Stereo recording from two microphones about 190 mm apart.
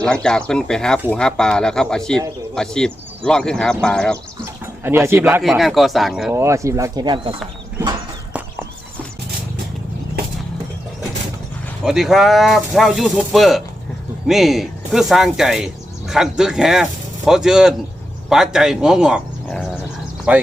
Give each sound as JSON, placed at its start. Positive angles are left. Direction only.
{"t": 0.0, "sound": "speech", "side_deg": 5}
{"t": 4.8, "sound": "speech", "side_deg": -10}
{"t": 5.4, "sound": "speech", "side_deg": 0}
{"t": 6.3, "sound": "speech", "side_deg": -15}
{"t": 11.9, "sound": "speech", "side_deg": 0}